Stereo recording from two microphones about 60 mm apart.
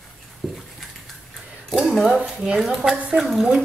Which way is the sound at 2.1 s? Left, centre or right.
Centre.